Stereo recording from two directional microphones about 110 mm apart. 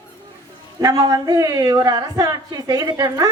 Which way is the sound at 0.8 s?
35° right (ahead or behind).